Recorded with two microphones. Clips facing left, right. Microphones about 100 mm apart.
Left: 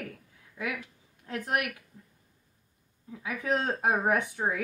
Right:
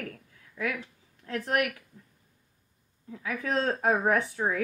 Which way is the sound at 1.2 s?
20° left (ahead or behind).